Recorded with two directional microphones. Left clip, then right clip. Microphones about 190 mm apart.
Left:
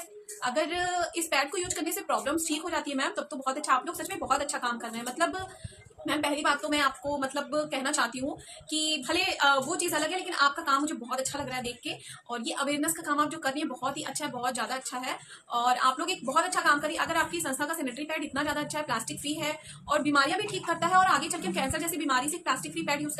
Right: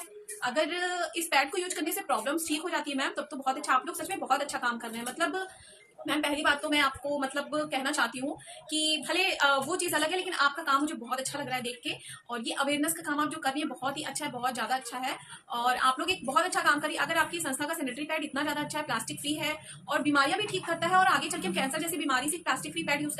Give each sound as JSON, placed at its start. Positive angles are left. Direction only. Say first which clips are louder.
{"t": 0.4, "sound": "a woman's voice", "louder": "left 1 dB", "side_deg": 20}